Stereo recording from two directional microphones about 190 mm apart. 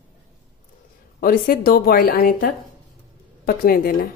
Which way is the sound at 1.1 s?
50° left (ahead or behind).